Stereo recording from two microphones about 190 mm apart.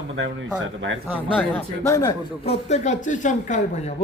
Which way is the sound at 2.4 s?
35° left (ahead or behind).